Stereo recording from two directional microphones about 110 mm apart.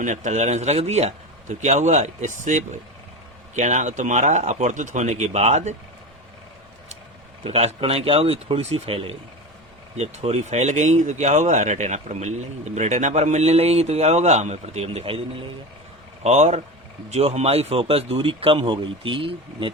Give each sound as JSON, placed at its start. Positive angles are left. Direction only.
{"t": 0.1, "sound": "speech", "side_deg": -90}
{"t": 7.4, "sound": "speech", "side_deg": -60}
{"t": 10.0, "sound": "speech", "side_deg": -80}
{"t": 16.2, "sound": "speech", "side_deg": -85}